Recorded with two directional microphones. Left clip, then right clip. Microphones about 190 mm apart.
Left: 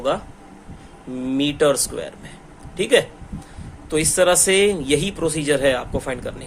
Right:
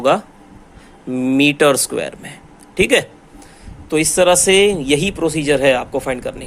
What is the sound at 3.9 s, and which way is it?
A man's voice, 25° right (ahead or behind).